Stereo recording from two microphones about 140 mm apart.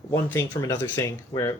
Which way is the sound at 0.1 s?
15° left (ahead or behind).